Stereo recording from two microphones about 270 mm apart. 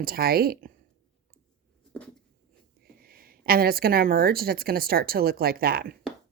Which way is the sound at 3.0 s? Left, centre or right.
Right.